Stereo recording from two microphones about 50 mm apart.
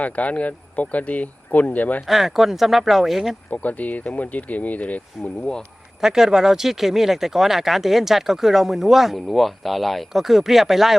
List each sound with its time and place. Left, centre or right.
0.0 s speech: left
2.0 s speech: centre
3.5 s speech: left
6.0 s speech: centre